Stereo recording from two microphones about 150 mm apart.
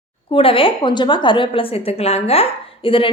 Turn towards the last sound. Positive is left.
turn(degrees=35)  # may be behind; listen again after turning